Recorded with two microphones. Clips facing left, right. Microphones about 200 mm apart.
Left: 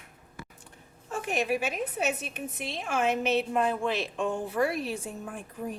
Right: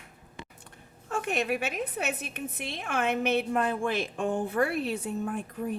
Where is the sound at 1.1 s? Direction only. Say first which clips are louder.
Even; 60° right (ahead or behind).